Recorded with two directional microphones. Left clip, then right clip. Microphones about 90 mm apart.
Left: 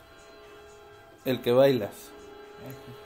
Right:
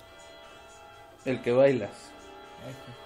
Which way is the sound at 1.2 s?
45° left (ahead or behind).